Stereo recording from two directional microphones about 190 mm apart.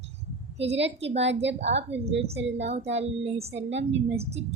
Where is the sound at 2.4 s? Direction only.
70° right (ahead or behind).